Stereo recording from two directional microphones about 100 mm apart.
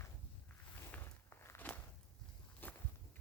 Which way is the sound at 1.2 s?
25° left (ahead or behind).